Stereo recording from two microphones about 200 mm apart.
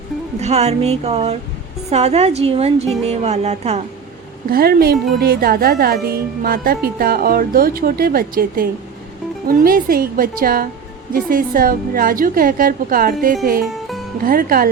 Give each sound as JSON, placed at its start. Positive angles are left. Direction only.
{"t": 0.3, "sound": "speech", "side_deg": -30}
{"t": 4.5, "sound": "a woman's voice", "side_deg": -50}